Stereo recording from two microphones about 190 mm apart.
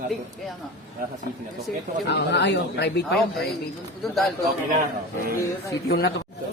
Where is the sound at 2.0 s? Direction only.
65° left (ahead or behind).